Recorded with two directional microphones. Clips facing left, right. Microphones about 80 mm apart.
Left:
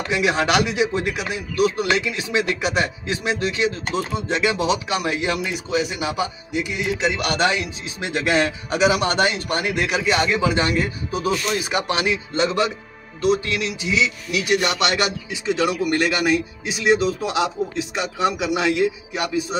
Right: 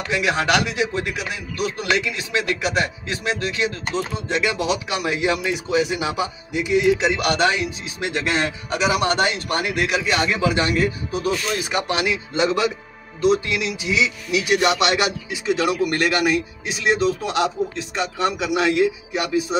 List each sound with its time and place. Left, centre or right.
0.1 s speech: centre
7.1 s a man's voice: centre
15.4 s a man's voice: centre